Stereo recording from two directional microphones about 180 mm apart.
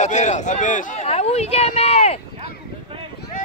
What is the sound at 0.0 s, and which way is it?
Speech, 40° left (ahead or behind).